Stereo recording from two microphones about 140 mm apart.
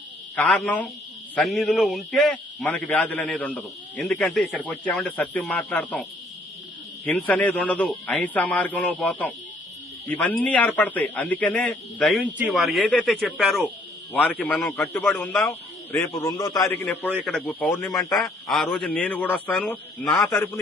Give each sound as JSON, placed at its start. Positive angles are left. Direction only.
{"t": 0.3, "sound": "a man's voice", "side_deg": 10}
{"t": 15.9, "sound": "a man's voice", "side_deg": 25}
{"t": 16.8, "sound": "speech", "side_deg": 10}
{"t": 17.2, "sound": "a man's voice", "side_deg": 0}